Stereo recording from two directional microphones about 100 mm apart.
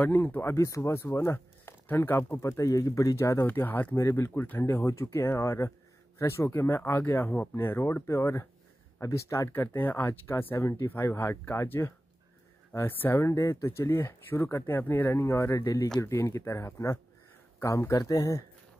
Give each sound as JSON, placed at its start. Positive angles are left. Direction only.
{"t": 0.0, "sound": "speech", "side_deg": 15}
{"t": 2.4, "sound": "speech", "side_deg": 30}
{"t": 3.4, "sound": "speech", "side_deg": 20}
{"t": 9.5, "sound": "speech", "side_deg": 20}